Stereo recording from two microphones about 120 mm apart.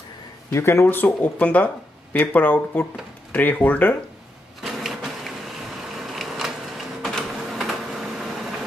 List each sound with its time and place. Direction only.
0.5 s speech: 25° left (ahead or behind)
4.6 s a sound: centre (ahead or behind)
7.0 s printer: centre (ahead or behind)